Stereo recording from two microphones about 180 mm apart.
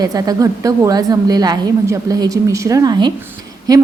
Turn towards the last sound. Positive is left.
turn(degrees=-20)  # may be behind; listen again after turning